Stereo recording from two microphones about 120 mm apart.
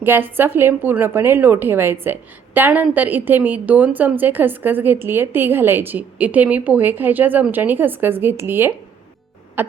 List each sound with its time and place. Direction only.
0.0 s a woman's voice: 15° right (ahead or behind)